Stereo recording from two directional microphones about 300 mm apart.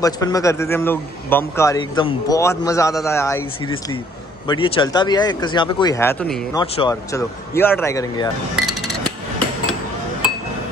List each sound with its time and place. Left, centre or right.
0.0 s a man's voice: centre
6.5 s a man's voice: centre